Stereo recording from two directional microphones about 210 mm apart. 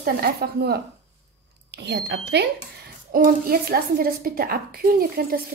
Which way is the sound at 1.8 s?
55° right (ahead or behind).